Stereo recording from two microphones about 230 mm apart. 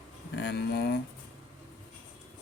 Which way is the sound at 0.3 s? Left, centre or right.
Left.